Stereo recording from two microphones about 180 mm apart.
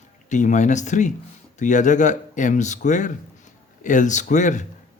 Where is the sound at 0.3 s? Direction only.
45° left (ahead or behind).